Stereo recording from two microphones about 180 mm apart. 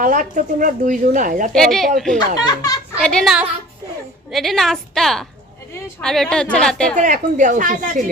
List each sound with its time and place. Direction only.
0.0 s speech: 45° right (ahead or behind)
1.5 s a woman's voice: centre (ahead or behind)
2.4 s a child's voice: 20° left (ahead or behind)
3.0 s a woman's voice: 5° left (ahead or behind)
6.9 s speech: 45° right (ahead or behind)